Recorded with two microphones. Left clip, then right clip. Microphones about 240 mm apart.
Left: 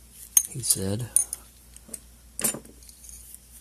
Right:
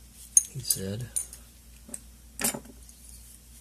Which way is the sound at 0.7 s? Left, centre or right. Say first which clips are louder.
Left 4 dB; left.